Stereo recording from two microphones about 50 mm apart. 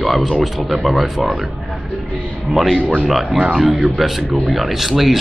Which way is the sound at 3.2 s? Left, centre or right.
Right.